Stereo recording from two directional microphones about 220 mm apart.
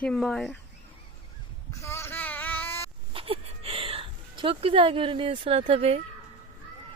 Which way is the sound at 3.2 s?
25° right (ahead or behind).